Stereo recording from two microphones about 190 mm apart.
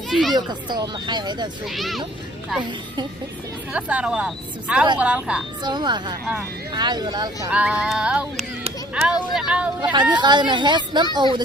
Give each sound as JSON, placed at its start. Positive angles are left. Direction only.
{"t": 0.1, "sound": "speech", "side_deg": 0}
{"t": 0.3, "sound": "speech", "side_deg": -20}
{"t": 1.6, "sound": "a sound", "side_deg": 0}
{"t": 2.6, "sound": "speech", "side_deg": -25}
{"t": 3.7, "sound": "speech", "side_deg": -5}
{"t": 5.6, "sound": "speech", "side_deg": -25}
{"t": 7.5, "sound": "a sound", "side_deg": -5}
{"t": 10.1, "sound": "speech", "side_deg": -25}